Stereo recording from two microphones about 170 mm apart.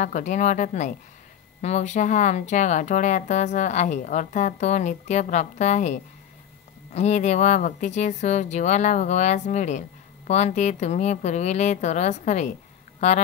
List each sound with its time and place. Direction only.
0.0 s speech: 45° left (ahead or behind)